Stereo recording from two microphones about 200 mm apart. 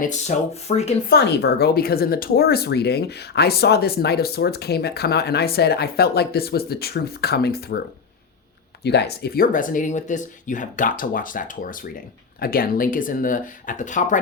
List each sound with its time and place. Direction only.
0.0 s speech: 35° left (ahead or behind)
1.1 s speech: 55° left (ahead or behind)
8.8 s speech: 55° left (ahead or behind); by 14.2 s 40° left (ahead or behind)